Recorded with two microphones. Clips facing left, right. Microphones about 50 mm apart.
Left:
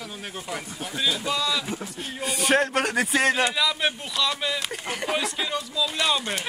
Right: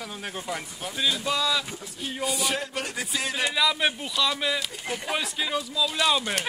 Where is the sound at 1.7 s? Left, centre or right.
Left.